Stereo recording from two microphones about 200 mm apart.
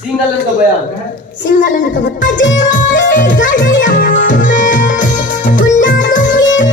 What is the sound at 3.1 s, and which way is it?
Speech, 40° left (ahead or behind).